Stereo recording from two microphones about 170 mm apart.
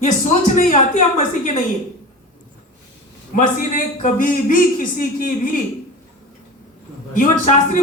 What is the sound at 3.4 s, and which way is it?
Speech, 50° left (ahead or behind).